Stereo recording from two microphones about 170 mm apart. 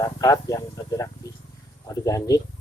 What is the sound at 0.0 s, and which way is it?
Speech, 20° left (ahead or behind).